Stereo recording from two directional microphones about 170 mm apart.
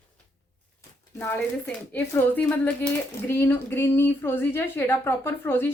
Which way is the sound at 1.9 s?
10° left (ahead or behind).